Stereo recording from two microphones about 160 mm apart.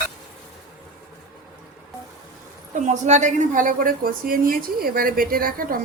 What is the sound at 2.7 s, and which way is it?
A woman's voice, 50° right (ahead or behind).